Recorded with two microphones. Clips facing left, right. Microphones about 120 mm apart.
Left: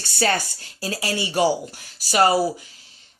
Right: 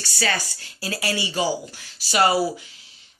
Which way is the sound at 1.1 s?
55° left (ahead or behind).